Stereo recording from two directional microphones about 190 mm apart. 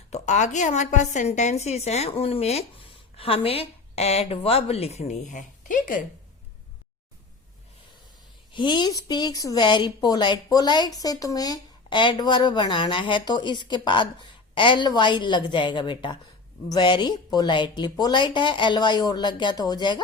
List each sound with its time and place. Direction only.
0.1 s a woman's voice: 40° left (ahead or behind)
8.5 s a woman's voice: 25° left (ahead or behind)